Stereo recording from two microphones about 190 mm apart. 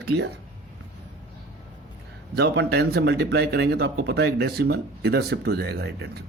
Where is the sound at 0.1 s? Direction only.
60° right (ahead or behind).